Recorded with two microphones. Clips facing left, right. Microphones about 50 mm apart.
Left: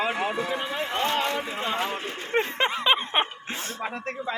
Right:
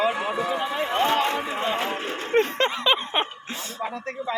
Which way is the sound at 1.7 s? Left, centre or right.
Right.